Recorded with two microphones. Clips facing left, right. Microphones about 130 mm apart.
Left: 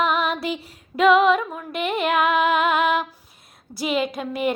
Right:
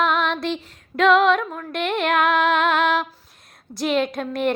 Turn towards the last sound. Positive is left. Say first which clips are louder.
# right 2 dB
turn(degrees=5)  # may be behind; listen again after turning